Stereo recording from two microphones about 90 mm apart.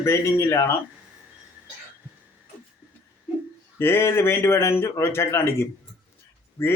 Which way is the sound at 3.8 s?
25° left (ahead or behind).